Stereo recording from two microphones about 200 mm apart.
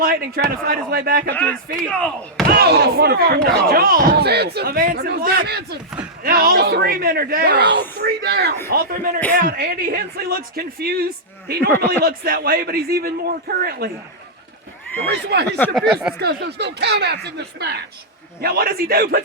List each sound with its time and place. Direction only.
0.0 s speech: 50° right (ahead or behind)
1.9 s speech: 5° left (ahead or behind)
2.5 s speech: 50° right (ahead or behind)
14.9 s speech: 10° left (ahead or behind)
15.9 s speech: 5° right (ahead or behind)
16.1 s speech: 55° right (ahead or behind)